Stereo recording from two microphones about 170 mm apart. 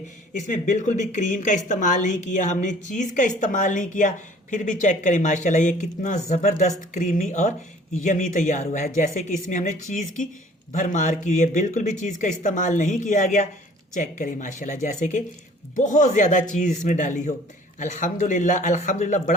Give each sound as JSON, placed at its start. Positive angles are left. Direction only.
{"t": 0.3, "sound": "a woman's voice", "side_deg": 45}